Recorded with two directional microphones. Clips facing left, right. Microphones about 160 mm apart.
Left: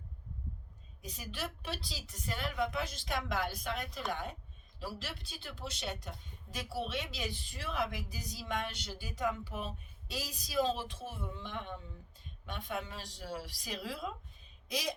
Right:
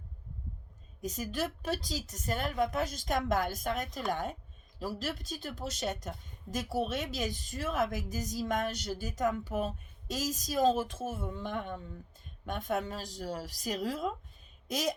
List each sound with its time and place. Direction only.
1.0 s a woman's voice: 45° right (ahead or behind)